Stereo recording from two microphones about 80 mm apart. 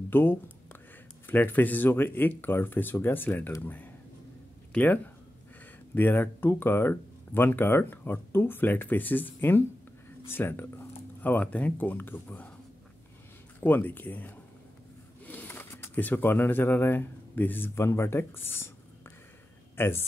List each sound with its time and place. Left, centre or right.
0.1 s speech: left
13.6 s a man's voice: left